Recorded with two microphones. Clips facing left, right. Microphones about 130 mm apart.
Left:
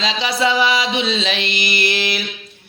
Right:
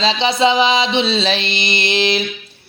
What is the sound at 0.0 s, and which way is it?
Speech, 25° right (ahead or behind).